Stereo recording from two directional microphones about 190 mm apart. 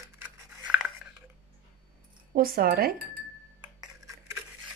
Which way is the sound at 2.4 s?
50° right (ahead or behind).